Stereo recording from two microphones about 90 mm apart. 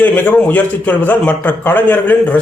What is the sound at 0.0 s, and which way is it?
A man's voice, 20° left (ahead or behind).